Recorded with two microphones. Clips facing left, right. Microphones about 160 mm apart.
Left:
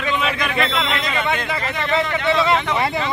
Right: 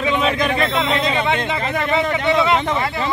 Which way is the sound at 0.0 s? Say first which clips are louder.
Right 4 dB; 35° right (ahead or behind).